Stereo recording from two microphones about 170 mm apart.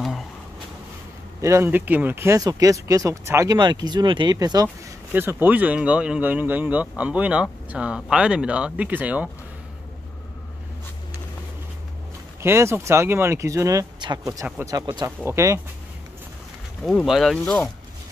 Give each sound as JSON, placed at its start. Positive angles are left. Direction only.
{"t": 1.4, "sound": "speech", "side_deg": -15}
{"t": 5.1, "sound": "speech", "side_deg": -10}
{"t": 12.4, "sound": "speech", "side_deg": -15}
{"t": 16.8, "sound": "speech", "side_deg": 0}